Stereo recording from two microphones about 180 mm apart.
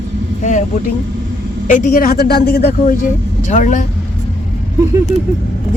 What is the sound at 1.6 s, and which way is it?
Speech, 45° left (ahead or behind).